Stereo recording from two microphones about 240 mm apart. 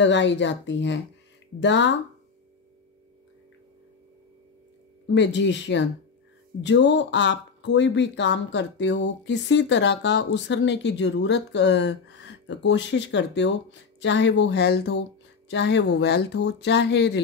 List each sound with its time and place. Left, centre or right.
0.0 s speech: left
5.1 s speech: left